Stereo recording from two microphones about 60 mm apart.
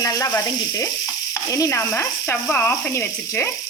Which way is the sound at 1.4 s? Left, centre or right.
Left.